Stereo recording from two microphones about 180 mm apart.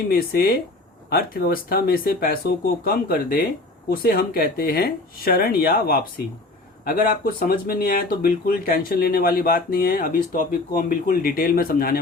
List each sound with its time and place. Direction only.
0.1 s speech: 55° left (ahead or behind)